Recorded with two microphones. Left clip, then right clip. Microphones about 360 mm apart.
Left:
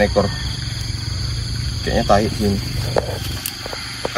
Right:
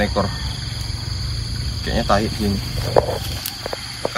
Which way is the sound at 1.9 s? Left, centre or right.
Centre.